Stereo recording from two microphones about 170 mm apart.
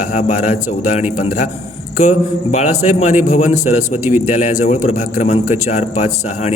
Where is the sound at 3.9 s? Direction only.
10° right (ahead or behind).